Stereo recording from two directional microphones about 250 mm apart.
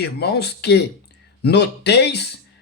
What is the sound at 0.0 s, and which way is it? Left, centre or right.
Speech, left.